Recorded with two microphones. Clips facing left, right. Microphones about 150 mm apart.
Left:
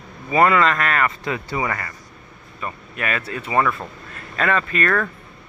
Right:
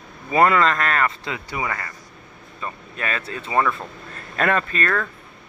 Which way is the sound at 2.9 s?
30° right (ahead or behind).